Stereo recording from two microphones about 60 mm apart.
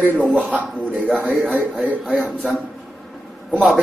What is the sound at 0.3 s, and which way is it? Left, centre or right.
Speech, right.